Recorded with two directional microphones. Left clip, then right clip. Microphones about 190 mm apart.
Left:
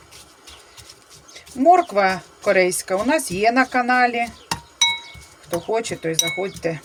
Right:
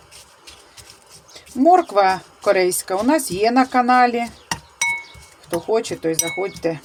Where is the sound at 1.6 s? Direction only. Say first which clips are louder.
Right 1 dB; 25° right (ahead or behind).